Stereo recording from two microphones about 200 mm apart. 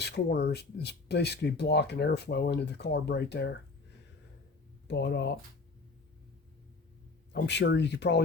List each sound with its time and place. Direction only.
0.0 s speech: 55° left (ahead or behind)
4.9 s speech: 60° left (ahead or behind)
7.4 s speech: 60° left (ahead or behind)